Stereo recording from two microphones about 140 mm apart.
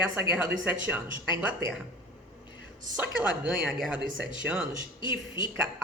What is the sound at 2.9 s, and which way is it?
Speech, 10° right (ahead or behind).